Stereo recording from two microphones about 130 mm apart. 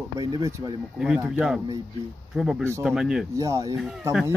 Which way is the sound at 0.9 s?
5° right (ahead or behind).